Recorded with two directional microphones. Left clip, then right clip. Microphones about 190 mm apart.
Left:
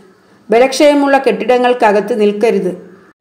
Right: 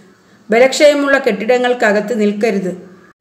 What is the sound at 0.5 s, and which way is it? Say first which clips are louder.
A woman's voice: even; 15° left (ahead or behind).